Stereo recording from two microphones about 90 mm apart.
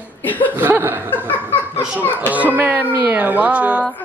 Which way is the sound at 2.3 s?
20° right (ahead or behind).